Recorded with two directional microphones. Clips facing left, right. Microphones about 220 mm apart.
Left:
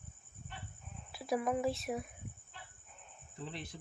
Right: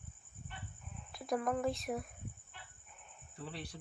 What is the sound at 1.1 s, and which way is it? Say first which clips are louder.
Speech: left 1 dB; 5° left (ahead or behind).